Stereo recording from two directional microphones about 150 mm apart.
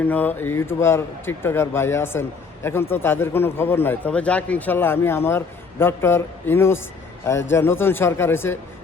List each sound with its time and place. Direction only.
0.0 s speech: 10° left (ahead or behind)